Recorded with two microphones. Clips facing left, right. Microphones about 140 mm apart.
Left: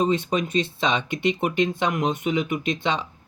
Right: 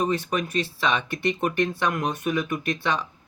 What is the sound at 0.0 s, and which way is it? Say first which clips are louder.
Speech: left 3 dB; 20° left (ahead or behind).